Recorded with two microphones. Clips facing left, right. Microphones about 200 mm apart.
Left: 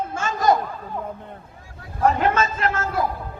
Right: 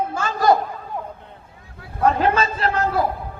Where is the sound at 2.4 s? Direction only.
35° right (ahead or behind).